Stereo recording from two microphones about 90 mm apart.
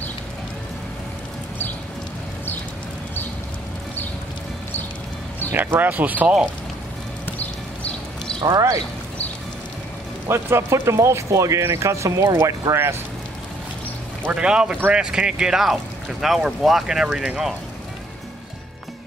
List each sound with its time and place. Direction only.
5.5 s speech: 20° right (ahead or behind)
7.2 s clip-clop: 20° left (ahead or behind)
8.4 s speech: 50° right (ahead or behind)
10.2 s speech: 30° right (ahead or behind)
14.3 s speech: 10° right (ahead or behind)